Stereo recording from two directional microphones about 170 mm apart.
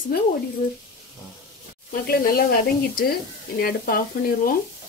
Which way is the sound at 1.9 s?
60° left (ahead or behind).